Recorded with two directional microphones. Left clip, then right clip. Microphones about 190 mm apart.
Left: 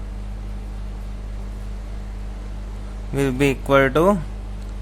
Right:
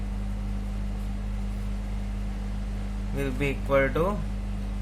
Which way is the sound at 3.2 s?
60° left (ahead or behind).